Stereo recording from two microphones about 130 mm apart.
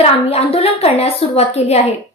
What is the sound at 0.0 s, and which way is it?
A woman's voice, 50° left (ahead or behind).